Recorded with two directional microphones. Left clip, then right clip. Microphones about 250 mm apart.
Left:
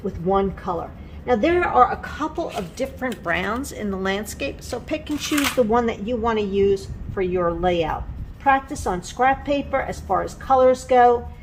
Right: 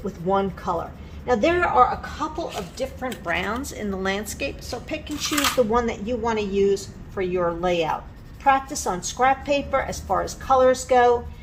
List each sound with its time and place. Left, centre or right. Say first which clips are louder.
0.0 s a woman's voice: left 2 dB; centre; by 3.2 s left
3.2 s a woman's voice: left 1 dB; centre
4.9 s a woman's voice: left 3 dB; left